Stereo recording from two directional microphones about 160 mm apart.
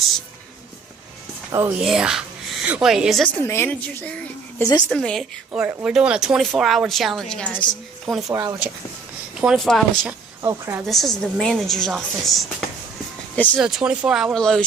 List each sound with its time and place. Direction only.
1.5 s speech: 15° right (ahead or behind)
1.8 s speech: 5° right (ahead or behind)
3.3 s a woman's voice: 15° left (ahead or behind)
5.5 s speech: 10° right (ahead or behind)
8.3 s speech: 25° right (ahead or behind)
9.3 s speech: 5° right (ahead or behind)
10.0 s speech: 15° right (ahead or behind)
10.8 s speech: centre (ahead or behind)
13.6 s speech: 5° right (ahead or behind)